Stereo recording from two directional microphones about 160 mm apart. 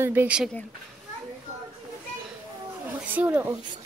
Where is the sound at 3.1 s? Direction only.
10° right (ahead or behind).